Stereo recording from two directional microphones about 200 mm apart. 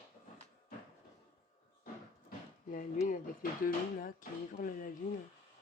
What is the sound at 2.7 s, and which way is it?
Speech, 45° left (ahead or behind).